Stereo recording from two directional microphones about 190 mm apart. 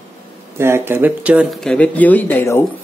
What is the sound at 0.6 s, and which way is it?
Speech, 10° right (ahead or behind).